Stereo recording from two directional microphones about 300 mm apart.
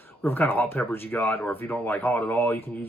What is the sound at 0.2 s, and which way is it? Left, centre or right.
Speech, centre.